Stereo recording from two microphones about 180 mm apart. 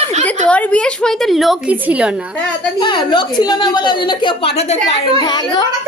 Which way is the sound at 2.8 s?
25° left (ahead or behind).